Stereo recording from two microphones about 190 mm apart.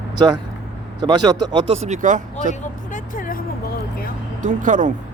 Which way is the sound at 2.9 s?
45° left (ahead or behind).